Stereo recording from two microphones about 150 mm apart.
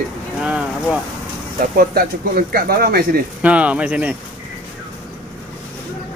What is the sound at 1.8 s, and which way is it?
Speech, 80° right.